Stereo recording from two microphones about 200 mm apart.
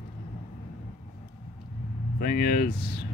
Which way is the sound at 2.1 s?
45° left (ahead or behind).